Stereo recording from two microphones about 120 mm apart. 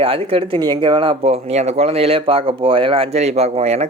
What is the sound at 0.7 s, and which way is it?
Speech, 40° right (ahead or behind).